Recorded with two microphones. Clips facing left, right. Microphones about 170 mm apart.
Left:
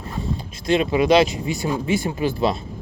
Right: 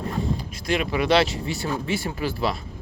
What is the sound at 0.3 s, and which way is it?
Speech, 25° left (ahead or behind).